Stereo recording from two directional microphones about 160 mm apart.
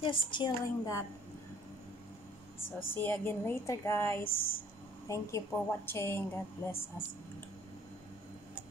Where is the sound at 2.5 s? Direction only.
15° left (ahead or behind).